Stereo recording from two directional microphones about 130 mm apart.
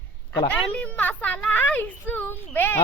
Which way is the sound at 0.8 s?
10° left (ahead or behind).